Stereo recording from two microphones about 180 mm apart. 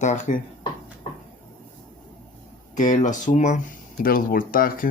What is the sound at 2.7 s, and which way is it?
Speech, 40° left (ahead or behind).